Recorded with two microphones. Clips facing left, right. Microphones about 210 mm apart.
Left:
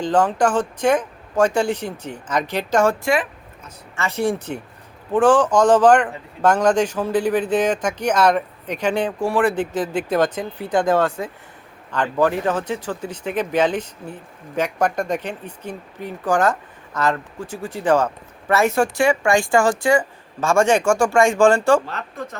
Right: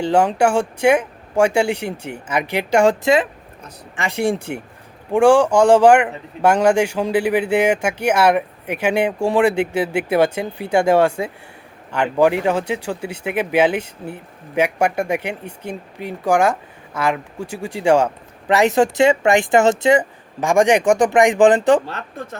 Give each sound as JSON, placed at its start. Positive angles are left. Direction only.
{"t": 0.0, "sound": "speech", "side_deg": -10}